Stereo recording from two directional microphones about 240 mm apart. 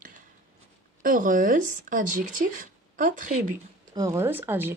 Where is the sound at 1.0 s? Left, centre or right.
Right.